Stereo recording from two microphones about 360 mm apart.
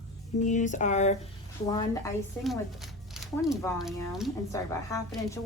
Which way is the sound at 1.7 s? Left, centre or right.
Centre.